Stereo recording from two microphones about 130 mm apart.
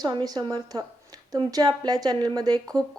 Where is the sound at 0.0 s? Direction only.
30° right (ahead or behind).